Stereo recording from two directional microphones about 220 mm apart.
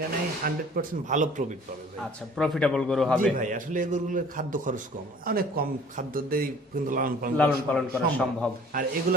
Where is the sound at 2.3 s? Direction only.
Centre (ahead or behind).